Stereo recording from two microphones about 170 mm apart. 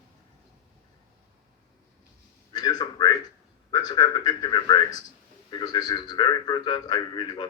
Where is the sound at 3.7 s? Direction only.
25° left (ahead or behind).